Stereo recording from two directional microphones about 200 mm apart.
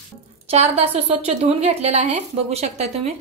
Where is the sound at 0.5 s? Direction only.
30° right (ahead or behind).